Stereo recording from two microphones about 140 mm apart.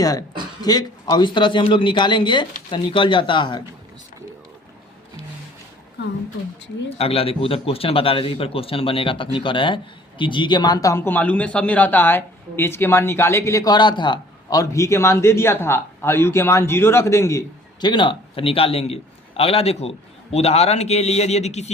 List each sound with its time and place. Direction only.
0.0 s a man's voice: 25° left (ahead or behind)
7.0 s a man's voice: 45° left (ahead or behind)